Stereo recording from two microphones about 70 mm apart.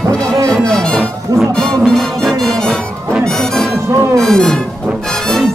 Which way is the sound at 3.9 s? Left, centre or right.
Right.